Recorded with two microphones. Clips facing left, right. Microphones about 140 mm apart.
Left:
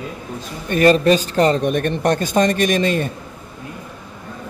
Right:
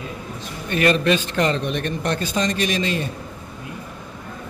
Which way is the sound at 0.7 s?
35° left (ahead or behind).